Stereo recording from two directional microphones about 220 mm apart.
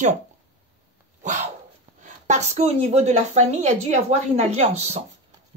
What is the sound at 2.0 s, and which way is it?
A woman's voice, 35° right (ahead or behind).